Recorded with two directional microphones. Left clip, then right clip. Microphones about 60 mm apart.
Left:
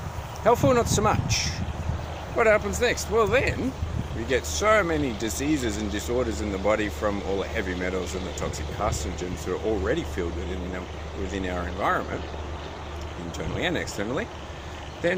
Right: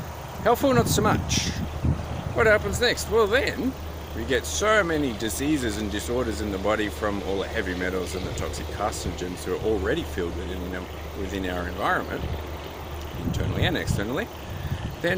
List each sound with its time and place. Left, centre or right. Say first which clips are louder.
0.4 s speech: even; right
11.3 s speech: right 1 dB; right
13.6 s speech: even; right
15.0 s speech: even; right